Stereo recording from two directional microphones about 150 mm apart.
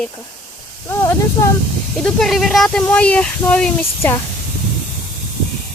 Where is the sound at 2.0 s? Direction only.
Centre (ahead or behind).